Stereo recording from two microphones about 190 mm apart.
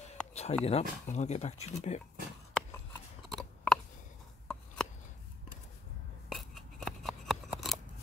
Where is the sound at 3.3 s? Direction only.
Centre (ahead or behind).